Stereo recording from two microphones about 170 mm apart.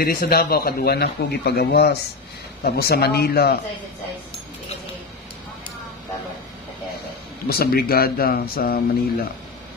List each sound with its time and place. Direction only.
0.0 s speech: 65° left (ahead or behind)
7.4 s speech: 65° left (ahead or behind)